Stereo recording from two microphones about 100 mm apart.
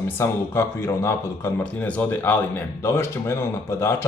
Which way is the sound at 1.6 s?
15° left (ahead or behind).